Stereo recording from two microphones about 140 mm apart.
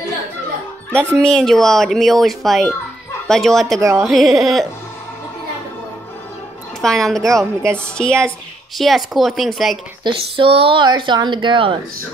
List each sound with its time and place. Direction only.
0.9 s speech: 5° left (ahead or behind)
6.8 s a woman's voice: 5° left (ahead or behind)
10.0 s speech: 40° right (ahead or behind)